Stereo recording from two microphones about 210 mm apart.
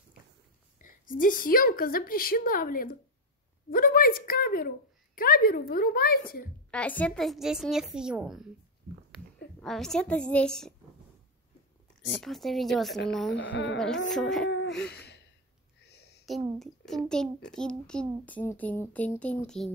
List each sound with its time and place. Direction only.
0.7 s a woman's voice: 40° left (ahead or behind)
6.7 s a child's voice: 5° left (ahead or behind)
9.6 s a child's voice: centre (ahead or behind)
12.2 s a child's voice: centre (ahead or behind)
13.3 s a woman's voice: 60° left (ahead or behind)
13.7 s a child's voice: centre (ahead or behind)
14.9 s sigh: 50° left (ahead or behind)
15.8 s a sound: 50° left (ahead or behind)
16.5 s a child's voice: centre (ahead or behind)